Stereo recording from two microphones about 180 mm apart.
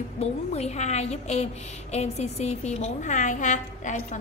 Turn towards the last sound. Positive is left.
turn(degrees=45)  # may be behind; listen again after turning